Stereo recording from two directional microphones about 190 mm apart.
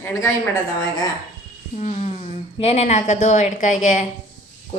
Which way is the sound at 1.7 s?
35° left (ahead or behind).